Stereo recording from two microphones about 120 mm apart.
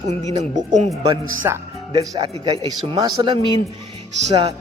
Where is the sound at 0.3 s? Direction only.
80° right.